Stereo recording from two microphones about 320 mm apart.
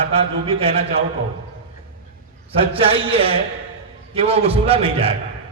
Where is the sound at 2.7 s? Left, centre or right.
Centre.